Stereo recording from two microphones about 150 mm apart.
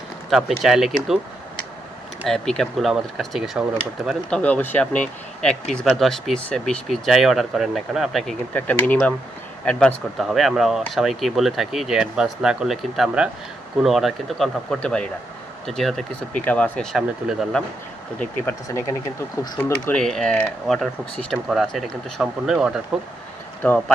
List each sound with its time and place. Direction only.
0.3 s speech: centre (ahead or behind)
2.2 s speech: 5° left (ahead or behind)
18.2 s speech: 15° left (ahead or behind); by 22.8 s 5° right (ahead or behind)
23.6 s speech: 5° left (ahead or behind)